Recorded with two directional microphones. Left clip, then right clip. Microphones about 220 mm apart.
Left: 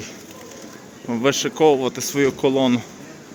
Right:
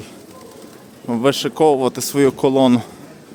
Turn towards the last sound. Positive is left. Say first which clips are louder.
# right 4 dB
turn(degrees=-25)  # may be behind; listen again after turning